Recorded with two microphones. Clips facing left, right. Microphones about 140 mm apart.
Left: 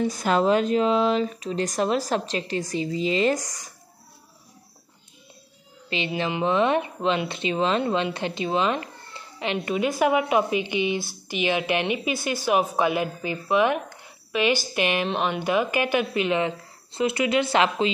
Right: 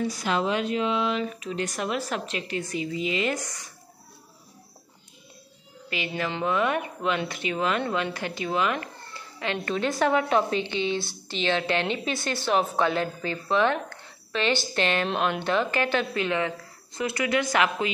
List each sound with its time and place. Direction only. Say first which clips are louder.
0.1 s speech: left 5 dB; 45° left (ahead or behind)
5.9 s a child's voice: left 3 dB; 25° left (ahead or behind)